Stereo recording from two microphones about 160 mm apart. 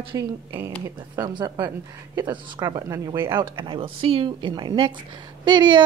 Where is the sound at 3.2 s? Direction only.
15° right (ahead or behind).